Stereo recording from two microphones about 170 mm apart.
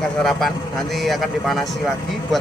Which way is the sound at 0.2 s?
Centre (ahead or behind).